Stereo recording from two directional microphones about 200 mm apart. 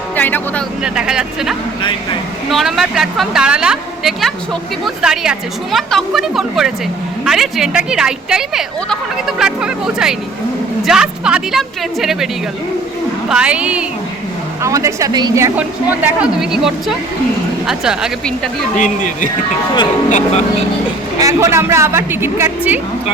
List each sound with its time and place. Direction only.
0.2 s speech: 10° left (ahead or behind)
0.8 s a woman's voice: 5° right (ahead or behind)
18.8 s speech: 40° left (ahead or behind)
21.2 s a woman's voice: 15° right (ahead or behind)